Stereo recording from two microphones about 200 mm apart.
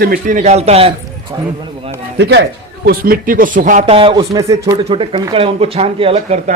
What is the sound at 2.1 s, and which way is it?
Speech, 60° right (ahead or behind).